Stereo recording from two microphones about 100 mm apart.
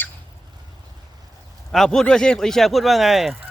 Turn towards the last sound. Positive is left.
turn(degrees=0)  # may be behind; listen again after turning